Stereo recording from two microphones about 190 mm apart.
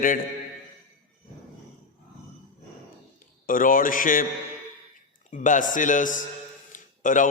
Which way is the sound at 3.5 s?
45° left (ahead or behind).